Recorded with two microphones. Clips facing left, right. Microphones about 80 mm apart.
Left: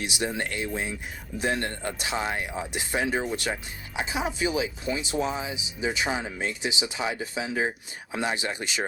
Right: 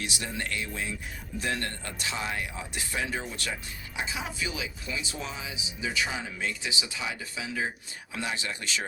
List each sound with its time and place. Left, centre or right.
0.0 s speech: left